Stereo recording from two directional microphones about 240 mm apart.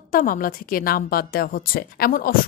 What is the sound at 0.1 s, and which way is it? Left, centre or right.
A woman's voice, left.